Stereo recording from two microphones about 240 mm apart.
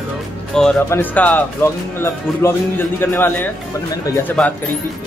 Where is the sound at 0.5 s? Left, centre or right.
Centre.